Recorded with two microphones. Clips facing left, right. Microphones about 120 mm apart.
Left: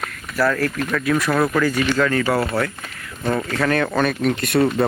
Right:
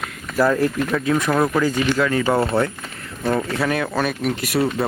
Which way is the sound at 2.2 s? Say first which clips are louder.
Right 2 dB; 25° right (ahead or behind).